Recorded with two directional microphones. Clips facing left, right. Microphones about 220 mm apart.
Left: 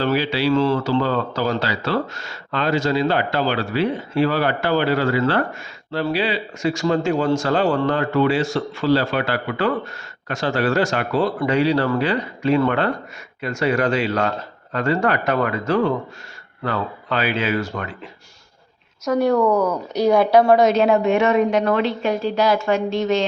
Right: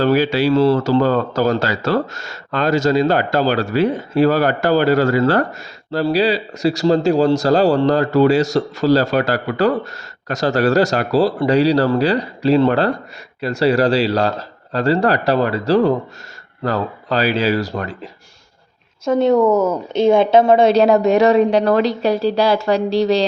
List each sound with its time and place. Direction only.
0.0 s a man's voice: 45° right (ahead or behind)
19.0 s speech: 25° right (ahead or behind)